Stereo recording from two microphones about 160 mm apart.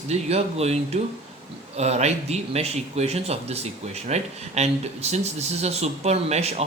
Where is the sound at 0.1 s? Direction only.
40° right (ahead or behind).